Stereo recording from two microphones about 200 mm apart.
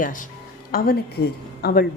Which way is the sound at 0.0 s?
40° left (ahead or behind).